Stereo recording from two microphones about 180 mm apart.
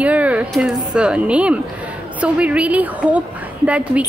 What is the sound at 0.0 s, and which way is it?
A woman's voice, 10° right (ahead or behind).